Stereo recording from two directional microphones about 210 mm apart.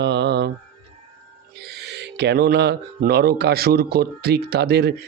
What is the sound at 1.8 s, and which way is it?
Speech, 55° right (ahead or behind).